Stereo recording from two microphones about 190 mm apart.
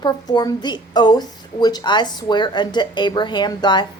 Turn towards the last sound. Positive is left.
turn(degrees=25)  # may be behind; listen again after turning